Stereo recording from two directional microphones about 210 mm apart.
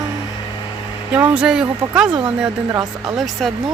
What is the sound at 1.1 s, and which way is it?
Speech, 5° right (ahead or behind).